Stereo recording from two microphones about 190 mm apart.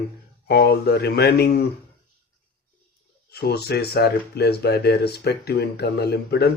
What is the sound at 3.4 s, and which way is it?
Speech, 60° left (ahead or behind).